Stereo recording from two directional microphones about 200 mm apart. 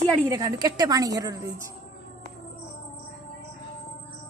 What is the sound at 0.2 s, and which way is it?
A man's voice, 15° right (ahead or behind).